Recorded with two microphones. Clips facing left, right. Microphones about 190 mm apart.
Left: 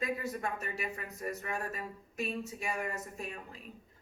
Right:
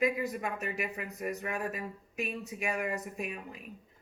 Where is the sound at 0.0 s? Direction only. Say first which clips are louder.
Right 4 dB; 15° right (ahead or behind).